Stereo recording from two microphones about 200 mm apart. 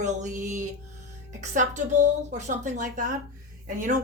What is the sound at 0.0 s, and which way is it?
Speech, 35° right (ahead or behind).